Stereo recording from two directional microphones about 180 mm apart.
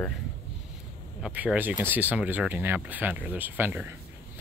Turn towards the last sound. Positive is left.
turn(degrees=-10)  # may be behind; listen again after turning